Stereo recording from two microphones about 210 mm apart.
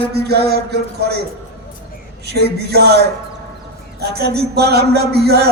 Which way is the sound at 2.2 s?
50° right (ahead or behind).